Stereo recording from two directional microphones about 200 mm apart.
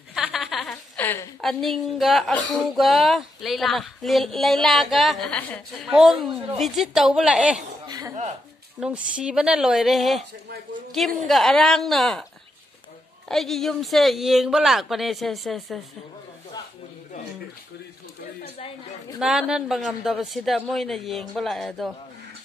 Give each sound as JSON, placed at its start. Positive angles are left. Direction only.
{"t": 0.1, "sound": "a sound", "side_deg": 0}
{"t": 1.4, "sound": "speech", "side_deg": 0}
{"t": 7.8, "sound": "cough", "side_deg": -20}
{"t": 8.7, "sound": "speech", "side_deg": -5}
{"t": 11.2, "sound": "speech", "side_deg": 0}
{"t": 13.3, "sound": "speech", "side_deg": 0}
{"t": 19.1, "sound": "speech", "side_deg": -5}